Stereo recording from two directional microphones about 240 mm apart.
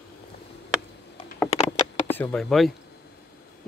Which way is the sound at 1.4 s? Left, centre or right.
Left.